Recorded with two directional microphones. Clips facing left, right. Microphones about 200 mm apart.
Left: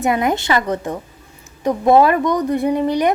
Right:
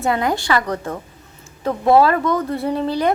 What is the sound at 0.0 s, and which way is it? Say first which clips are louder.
A woman's voice: left 2 dB; 20° left (ahead or behind).